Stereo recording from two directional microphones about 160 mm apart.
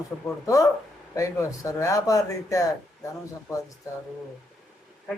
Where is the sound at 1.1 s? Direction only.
20° left (ahead or behind).